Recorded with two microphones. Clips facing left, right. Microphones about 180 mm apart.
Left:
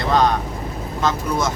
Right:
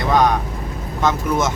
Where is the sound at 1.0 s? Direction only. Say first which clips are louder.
Right 2 dB; 20° right (ahead or behind).